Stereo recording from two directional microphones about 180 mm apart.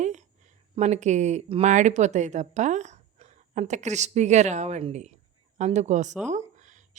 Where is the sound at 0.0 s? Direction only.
40° right (ahead or behind).